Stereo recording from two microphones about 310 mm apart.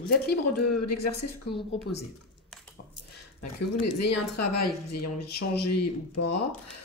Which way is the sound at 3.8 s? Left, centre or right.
Left.